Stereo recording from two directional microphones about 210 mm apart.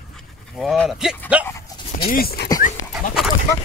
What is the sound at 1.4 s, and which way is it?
Dog, 15° left (ahead or behind).